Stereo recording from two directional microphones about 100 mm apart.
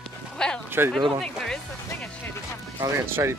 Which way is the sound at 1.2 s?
5° left (ahead or behind).